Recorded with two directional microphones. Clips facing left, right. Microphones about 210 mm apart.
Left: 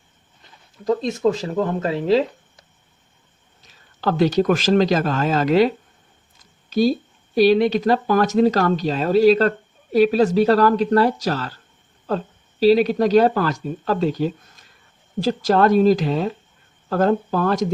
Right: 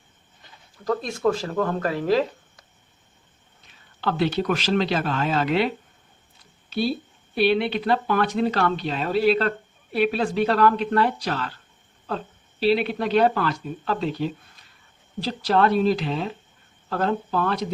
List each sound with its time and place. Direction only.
0.9 s speech: 20° left (ahead or behind)
3.6 s speech: 40° left (ahead or behind)